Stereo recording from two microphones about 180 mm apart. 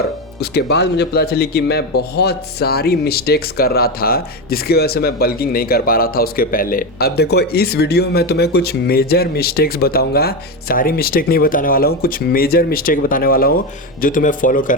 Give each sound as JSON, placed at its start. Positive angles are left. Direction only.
{"t": 0.3, "sound": "speech", "side_deg": 65}